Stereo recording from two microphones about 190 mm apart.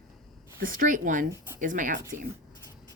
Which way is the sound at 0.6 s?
45° right (ahead or behind).